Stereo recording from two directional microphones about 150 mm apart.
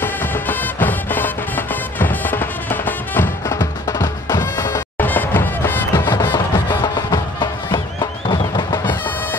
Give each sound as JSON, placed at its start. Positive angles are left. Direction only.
{"t": 0.0, "sound": "music", "side_deg": 15}
{"t": 3.5, "sound": "music", "side_deg": 25}
{"t": 4.9, "sound": "music", "side_deg": 10}
{"t": 6.0, "sound": "music", "side_deg": 30}